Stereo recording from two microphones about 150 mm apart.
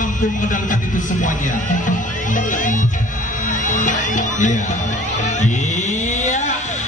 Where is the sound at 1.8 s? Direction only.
60° left (ahead or behind).